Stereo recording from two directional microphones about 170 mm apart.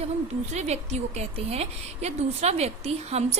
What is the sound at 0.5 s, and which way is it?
A woman's voice, 40° right (ahead or behind).